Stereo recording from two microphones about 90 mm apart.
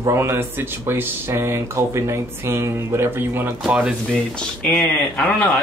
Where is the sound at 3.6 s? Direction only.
10° right (ahead or behind).